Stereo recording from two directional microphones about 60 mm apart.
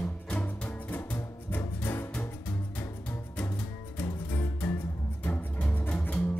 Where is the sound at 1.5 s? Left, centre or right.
Left.